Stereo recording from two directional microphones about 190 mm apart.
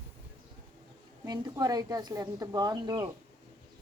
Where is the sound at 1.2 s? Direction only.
20° right (ahead or behind).